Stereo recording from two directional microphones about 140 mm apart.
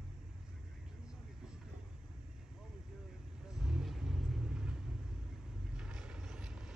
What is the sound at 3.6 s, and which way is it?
Vehicle, 5° right (ahead or behind).